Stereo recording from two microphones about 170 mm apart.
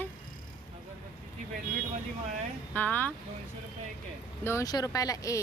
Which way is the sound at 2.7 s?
10° left (ahead or behind).